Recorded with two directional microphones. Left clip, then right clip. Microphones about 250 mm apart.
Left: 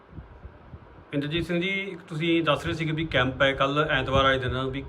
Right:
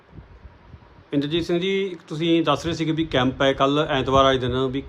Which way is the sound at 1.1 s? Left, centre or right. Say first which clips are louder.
Right 6 dB; centre.